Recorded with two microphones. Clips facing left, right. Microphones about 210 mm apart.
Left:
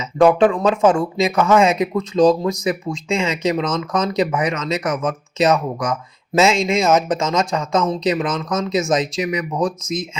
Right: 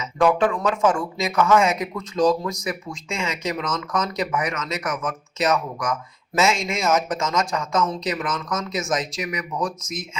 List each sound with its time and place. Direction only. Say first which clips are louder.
0.0 s speech: left 6 dB; 30° left (ahead or behind)